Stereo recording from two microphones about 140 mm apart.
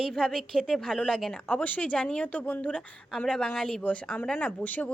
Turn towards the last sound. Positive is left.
turn(degrees=10)  # may be behind; listen again after turning